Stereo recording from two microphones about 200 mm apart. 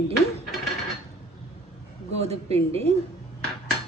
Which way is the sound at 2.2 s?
30° right (ahead or behind).